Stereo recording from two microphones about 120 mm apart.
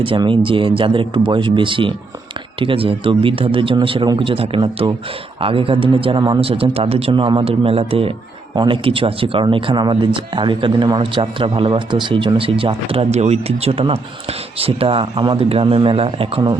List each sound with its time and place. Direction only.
0.0 s speech: 45° right (ahead or behind)